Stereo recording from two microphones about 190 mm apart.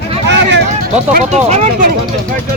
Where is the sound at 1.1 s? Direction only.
35° right (ahead or behind).